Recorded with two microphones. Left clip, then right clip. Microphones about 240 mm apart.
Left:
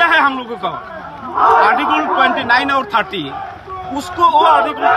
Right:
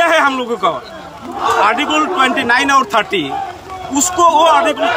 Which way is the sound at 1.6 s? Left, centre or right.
Centre.